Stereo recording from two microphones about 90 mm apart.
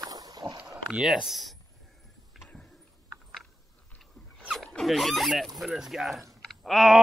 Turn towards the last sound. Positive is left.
turn(degrees=-5)  # may be behind; listen again after turning